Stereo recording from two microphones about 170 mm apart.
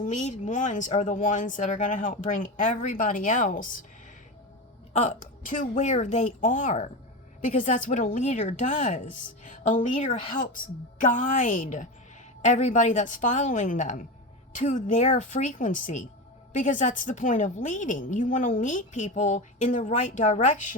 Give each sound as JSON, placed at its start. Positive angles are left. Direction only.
{"t": 0.0, "sound": "a woman's voice", "side_deg": 45}
{"t": 4.9, "sound": "a woman's voice", "side_deg": 45}